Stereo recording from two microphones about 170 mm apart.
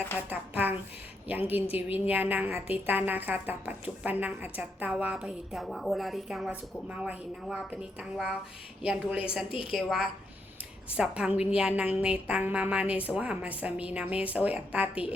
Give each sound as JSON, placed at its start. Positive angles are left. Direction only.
{"t": 0.2, "sound": "a woman's voice", "side_deg": -10}
{"t": 9.5, "sound": "a woman's voice", "side_deg": 30}
{"t": 9.7, "sound": "a woman's voice", "side_deg": -5}